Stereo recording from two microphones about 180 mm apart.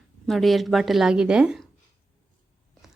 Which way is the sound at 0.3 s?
Centre (ahead or behind).